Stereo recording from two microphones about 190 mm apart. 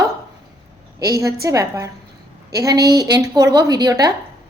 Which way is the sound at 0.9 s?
15° right (ahead or behind).